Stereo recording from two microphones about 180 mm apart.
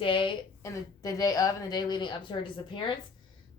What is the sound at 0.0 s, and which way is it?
A woman's voice, 30° left (ahead or behind).